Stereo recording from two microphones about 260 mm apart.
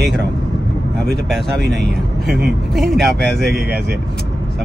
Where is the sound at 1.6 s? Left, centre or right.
Right.